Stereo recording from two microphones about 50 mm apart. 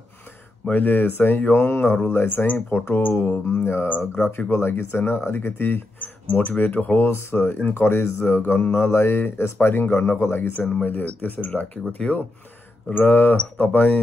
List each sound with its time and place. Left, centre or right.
0.7 s speech: left
2.2 s speech: left
4.5 s speech: left
12.9 s speech: left